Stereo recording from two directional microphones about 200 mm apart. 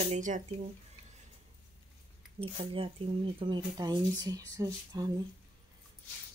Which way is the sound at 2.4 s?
30° right (ahead or behind).